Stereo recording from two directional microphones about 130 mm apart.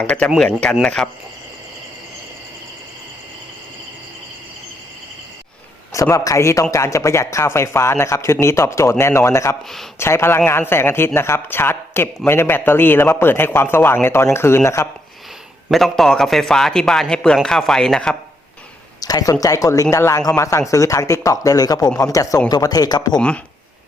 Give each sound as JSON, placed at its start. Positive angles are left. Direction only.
{"t": 0.0, "sound": "speech", "side_deg": 10}
{"t": 5.9, "sound": "speech", "side_deg": 25}
{"t": 15.7, "sound": "a man's voice", "side_deg": 0}
{"t": 18.9, "sound": "speech", "side_deg": 30}
{"t": 23.1, "sound": "speech", "side_deg": 10}